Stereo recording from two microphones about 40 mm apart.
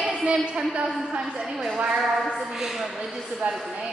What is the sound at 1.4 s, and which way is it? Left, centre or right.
Speech, centre.